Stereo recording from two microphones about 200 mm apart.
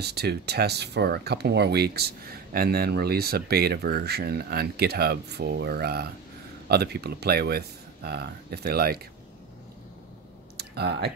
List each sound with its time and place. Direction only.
0.0 s speech: 55° right (ahead or behind)
10.6 s typing: 55° right (ahead or behind)